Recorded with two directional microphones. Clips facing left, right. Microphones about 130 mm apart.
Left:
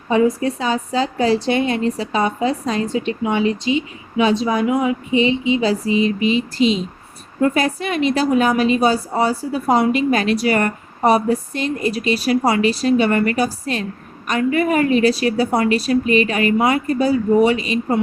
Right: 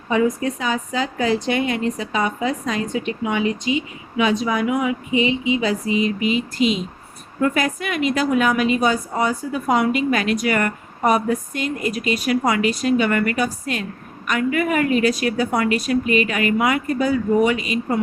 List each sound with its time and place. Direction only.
0.1 s a woman's voice: 30° left (ahead or behind)